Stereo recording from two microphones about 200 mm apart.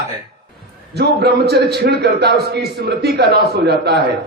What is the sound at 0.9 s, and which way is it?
A man's voice, 55° right (ahead or behind).